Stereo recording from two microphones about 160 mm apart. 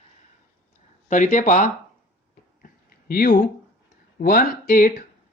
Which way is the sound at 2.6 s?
65° left (ahead or behind).